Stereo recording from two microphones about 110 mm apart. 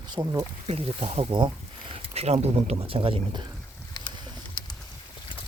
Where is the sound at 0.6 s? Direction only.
65° right (ahead or behind).